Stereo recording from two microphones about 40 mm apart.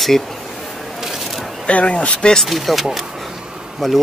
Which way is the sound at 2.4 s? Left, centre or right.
Centre.